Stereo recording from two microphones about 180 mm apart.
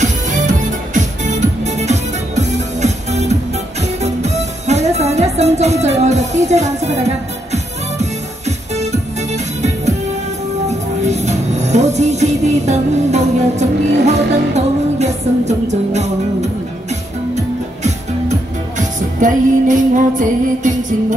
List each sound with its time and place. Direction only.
0.0 s music: 45° right (ahead or behind)
18.8 s music: 45° right (ahead or behind)